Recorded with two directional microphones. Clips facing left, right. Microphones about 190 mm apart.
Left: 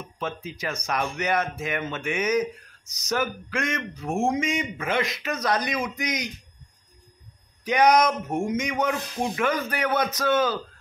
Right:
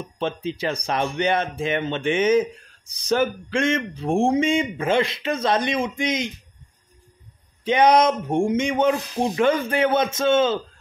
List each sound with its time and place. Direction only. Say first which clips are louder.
0.0 s speech: right 6 dB; 30° right (ahead or behind)
7.6 s speech: right 3 dB; 25° right (ahead or behind)